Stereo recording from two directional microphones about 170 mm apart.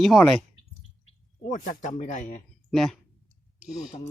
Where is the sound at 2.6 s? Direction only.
Centre (ahead or behind).